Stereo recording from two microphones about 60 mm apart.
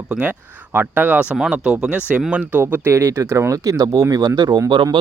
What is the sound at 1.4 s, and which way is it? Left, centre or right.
Speech, centre.